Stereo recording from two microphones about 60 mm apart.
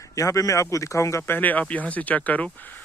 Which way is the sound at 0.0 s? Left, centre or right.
Left.